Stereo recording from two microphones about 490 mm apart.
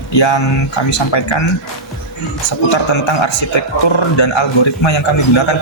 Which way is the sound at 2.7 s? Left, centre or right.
Left.